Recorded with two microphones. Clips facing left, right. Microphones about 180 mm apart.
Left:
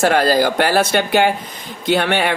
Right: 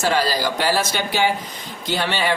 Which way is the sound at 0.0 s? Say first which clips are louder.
Left 6 dB; 55° left (ahead or behind).